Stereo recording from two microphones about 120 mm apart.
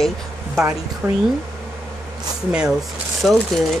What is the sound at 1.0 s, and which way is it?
Speech, 20° right (ahead or behind).